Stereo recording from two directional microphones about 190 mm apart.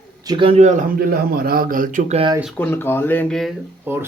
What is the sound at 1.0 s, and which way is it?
A man's voice, 50° right (ahead or behind).